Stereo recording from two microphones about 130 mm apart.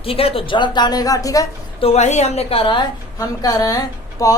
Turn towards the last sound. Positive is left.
turn(degrees=30)  # may be behind; listen again after turning